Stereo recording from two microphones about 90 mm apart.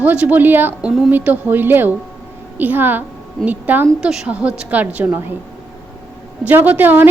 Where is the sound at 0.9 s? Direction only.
5° right (ahead or behind).